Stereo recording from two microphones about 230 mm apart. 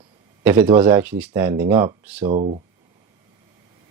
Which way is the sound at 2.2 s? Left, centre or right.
Right.